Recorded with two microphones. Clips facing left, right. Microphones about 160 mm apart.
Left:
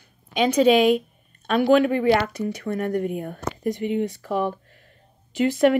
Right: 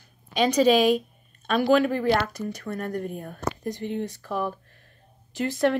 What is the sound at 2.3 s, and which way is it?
Speech, 60° left (ahead or behind).